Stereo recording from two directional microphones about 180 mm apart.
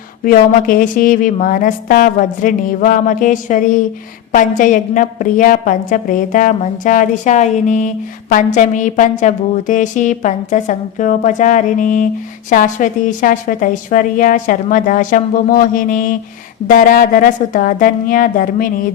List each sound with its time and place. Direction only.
0.3 s a woman's voice: 50° left (ahead or behind)